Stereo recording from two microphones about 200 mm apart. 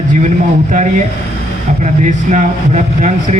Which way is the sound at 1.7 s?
40° right (ahead or behind).